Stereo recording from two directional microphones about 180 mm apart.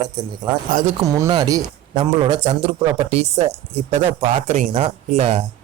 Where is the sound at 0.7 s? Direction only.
50° right (ahead or behind).